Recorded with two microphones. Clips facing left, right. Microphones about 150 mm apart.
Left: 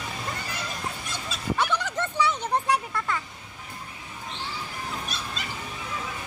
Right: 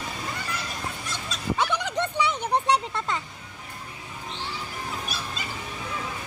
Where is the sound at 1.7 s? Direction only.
15° right (ahead or behind).